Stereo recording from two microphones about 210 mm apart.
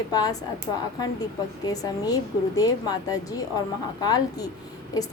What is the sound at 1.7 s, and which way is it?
A woman's voice, 15° left (ahead or behind).